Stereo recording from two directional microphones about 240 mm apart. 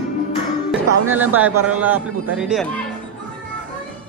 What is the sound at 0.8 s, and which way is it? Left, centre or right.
Music, right.